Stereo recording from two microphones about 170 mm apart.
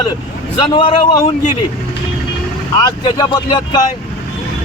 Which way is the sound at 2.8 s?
25° left (ahead or behind).